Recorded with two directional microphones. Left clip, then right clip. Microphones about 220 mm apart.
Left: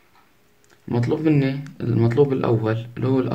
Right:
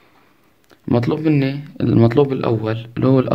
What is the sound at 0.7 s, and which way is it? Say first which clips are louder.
Speech: right 5 dB; 45° right (ahead or behind).